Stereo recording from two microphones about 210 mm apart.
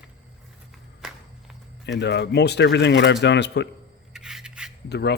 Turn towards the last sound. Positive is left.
turn(degrees=50)  # may be behind; listen again after turning